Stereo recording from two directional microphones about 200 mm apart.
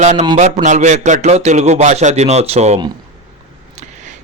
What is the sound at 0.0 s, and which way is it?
A man's voice, 35° right (ahead or behind).